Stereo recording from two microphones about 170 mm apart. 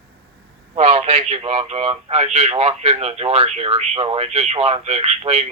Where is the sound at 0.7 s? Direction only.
40° right (ahead or behind).